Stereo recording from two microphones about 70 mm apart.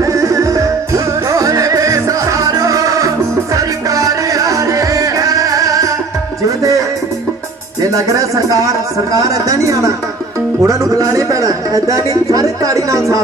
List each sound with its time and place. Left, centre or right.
0.0 s music: right
7.8 s speech: right